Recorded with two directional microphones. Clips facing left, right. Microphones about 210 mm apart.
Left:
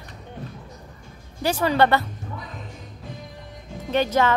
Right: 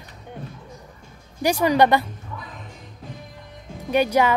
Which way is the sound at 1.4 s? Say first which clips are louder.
Right 2 dB; 15° right (ahead or behind).